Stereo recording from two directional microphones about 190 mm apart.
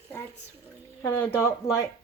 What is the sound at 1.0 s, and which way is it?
Speech, 15° left (ahead or behind).